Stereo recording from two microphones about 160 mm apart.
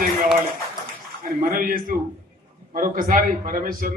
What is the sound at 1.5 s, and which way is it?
A man's voice, 60° right (ahead or behind).